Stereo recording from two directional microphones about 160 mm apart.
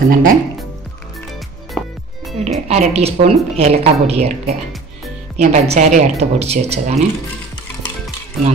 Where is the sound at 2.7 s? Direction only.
40° right (ahead or behind).